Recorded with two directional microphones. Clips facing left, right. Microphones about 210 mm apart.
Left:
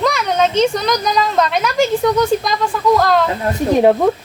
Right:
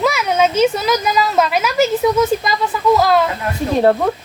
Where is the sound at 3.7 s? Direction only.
15° left (ahead or behind).